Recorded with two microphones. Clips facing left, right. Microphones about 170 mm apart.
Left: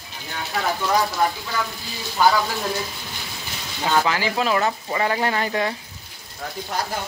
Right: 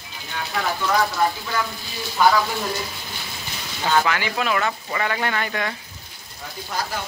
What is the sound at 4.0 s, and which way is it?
Speech, 30° left (ahead or behind).